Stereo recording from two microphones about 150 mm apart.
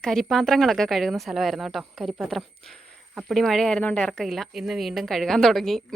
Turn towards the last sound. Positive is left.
turn(degrees=0)  # may be behind; listen again after turning